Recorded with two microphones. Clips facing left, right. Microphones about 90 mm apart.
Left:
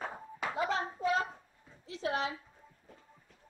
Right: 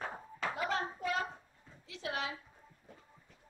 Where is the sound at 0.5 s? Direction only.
25° left (ahead or behind).